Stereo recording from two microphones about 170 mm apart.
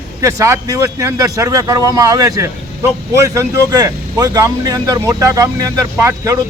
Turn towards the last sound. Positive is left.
turn(degrees=-20)  # may be behind; listen again after turning